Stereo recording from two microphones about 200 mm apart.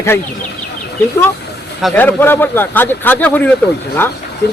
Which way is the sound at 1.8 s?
5° left (ahead or behind).